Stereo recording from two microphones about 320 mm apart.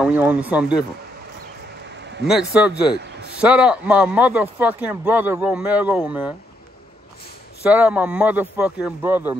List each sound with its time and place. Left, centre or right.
0.0 s speech: centre
2.2 s speech: centre
7.6 s speech: centre